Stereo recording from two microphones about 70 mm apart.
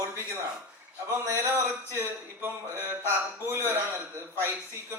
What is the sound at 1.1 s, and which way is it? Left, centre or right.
A man's voice, right.